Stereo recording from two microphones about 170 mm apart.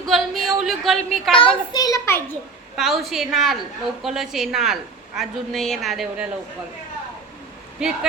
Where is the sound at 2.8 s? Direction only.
Centre (ahead or behind).